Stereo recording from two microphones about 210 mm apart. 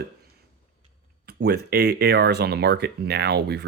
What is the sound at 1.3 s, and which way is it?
Speech, 50° right (ahead or behind).